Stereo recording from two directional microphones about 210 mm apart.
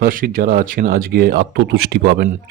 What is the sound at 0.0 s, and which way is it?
Speech, 40° right (ahead or behind).